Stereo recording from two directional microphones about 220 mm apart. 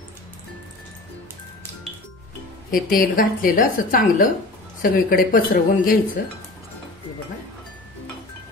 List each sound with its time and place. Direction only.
2.7 s a woman's voice: 40° left (ahead or behind)